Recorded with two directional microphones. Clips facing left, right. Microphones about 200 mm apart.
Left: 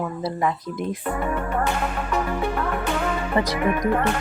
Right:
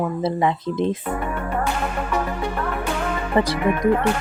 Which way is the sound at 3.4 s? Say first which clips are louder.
Right 4 dB; 30° right (ahead or behind).